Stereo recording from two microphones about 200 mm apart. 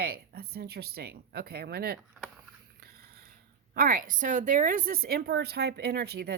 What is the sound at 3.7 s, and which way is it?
Speech, 50° right (ahead or behind).